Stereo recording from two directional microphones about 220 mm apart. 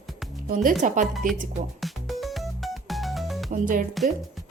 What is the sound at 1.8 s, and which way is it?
Music, centre (ahead or behind).